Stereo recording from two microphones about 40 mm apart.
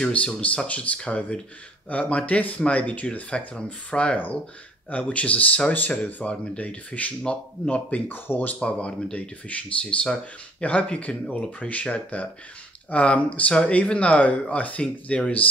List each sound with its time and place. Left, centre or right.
0.1 s speech: left
5.8 s speech: left
6.5 s speech: left
8.1 s speech: left
8.5 s speech: left